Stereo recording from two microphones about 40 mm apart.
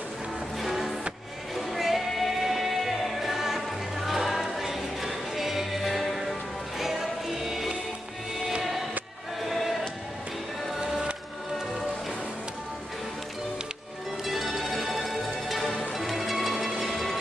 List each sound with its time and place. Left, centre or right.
0.6 s music: centre
9.5 s choir: centre
10.8 s music: centre
14.2 s music: centre